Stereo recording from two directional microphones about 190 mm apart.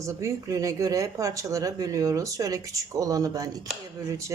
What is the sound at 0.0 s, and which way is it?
Speech, 15° right (ahead or behind).